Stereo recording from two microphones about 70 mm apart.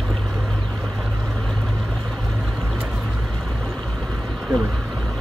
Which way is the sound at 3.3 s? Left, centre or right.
Centre.